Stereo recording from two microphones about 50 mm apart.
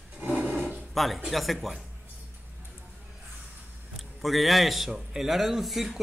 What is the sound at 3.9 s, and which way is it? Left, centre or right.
A man's voice, centre.